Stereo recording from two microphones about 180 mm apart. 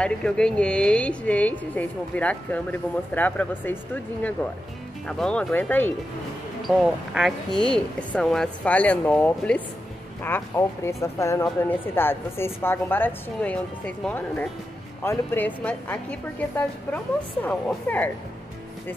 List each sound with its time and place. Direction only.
0.0 s a woman's voice: 5° left (ahead or behind)
6.8 s a woman's voice: centre (ahead or behind)